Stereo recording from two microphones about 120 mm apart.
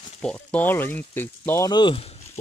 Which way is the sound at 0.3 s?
15° left (ahead or behind).